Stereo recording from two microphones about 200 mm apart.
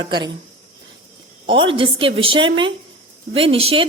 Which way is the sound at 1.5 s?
25° right (ahead or behind).